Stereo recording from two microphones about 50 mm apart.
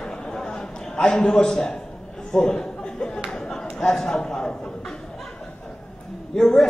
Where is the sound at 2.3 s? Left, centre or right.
Centre.